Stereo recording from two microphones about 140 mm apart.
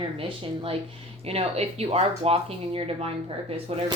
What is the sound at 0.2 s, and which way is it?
A woman's voice, 40° right (ahead or behind).